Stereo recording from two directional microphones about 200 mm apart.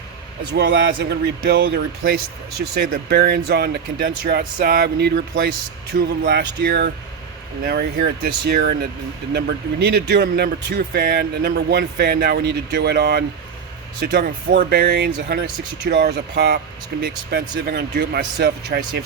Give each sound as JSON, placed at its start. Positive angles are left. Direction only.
{"t": 0.5, "sound": "speech", "side_deg": -55}